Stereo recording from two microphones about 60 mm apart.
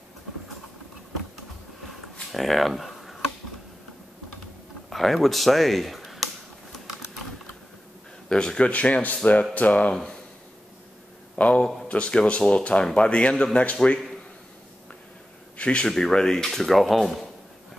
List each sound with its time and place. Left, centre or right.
2.3 s speech: centre
4.8 s speech: centre
8.3 s speech: centre
11.3 s a man's voice: left
15.5 s a man's voice: centre
15.9 s speech: centre